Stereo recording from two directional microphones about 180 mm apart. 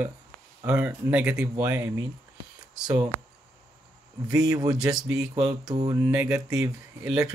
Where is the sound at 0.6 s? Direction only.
10° right (ahead or behind).